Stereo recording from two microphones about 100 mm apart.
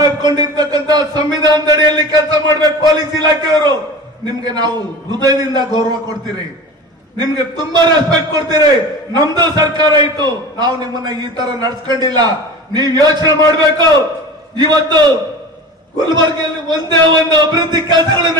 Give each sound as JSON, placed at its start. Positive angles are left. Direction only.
{"t": 0.0, "sound": "a man's voice", "side_deg": -45}
{"t": 14.6, "sound": "a man's voice", "side_deg": -45}